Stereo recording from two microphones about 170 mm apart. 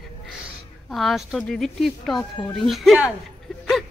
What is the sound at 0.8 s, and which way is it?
A woman's voice, centre (ahead or behind).